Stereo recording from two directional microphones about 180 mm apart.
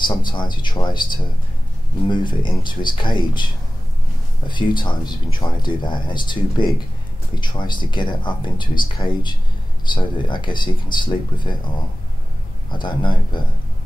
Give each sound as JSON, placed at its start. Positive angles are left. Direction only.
{"t": 0.0, "sound": "speech", "side_deg": 25}
{"t": 4.5, "sound": "speech", "side_deg": 25}
{"t": 12.7, "sound": "speech", "side_deg": 25}